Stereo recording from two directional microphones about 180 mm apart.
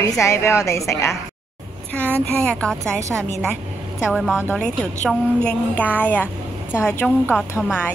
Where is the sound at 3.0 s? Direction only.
15° right (ahead or behind).